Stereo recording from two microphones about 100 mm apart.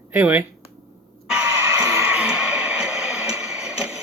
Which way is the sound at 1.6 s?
25° right (ahead or behind).